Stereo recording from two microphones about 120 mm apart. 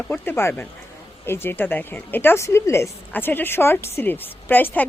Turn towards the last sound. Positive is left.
turn(degrees=15)  # may be behind; listen again after turning